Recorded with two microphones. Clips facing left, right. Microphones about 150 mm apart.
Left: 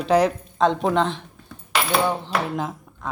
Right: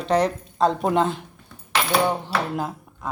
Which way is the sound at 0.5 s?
5° right (ahead or behind).